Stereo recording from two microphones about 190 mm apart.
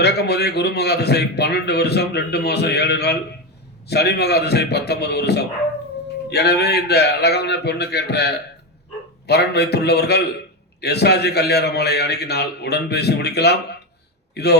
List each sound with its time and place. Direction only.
0.0 s a man's voice: 60° left (ahead or behind)